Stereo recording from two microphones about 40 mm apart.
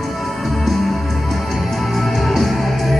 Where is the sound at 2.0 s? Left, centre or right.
Centre.